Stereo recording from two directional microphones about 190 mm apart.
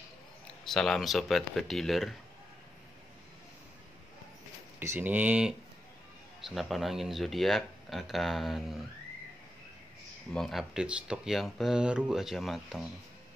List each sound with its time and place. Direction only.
0.7 s speech: centre (ahead or behind)
4.7 s speech: 10° right (ahead or behind)
10.3 s speech: centre (ahead or behind)